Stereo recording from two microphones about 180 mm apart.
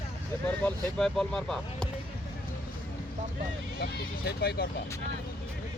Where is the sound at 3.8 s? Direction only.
65° left (ahead or behind).